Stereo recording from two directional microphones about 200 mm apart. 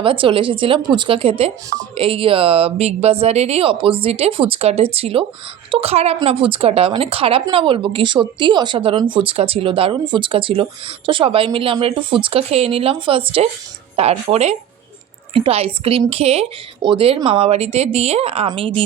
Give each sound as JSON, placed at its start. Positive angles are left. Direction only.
{"t": 0.0, "sound": "a woman's voice", "side_deg": -25}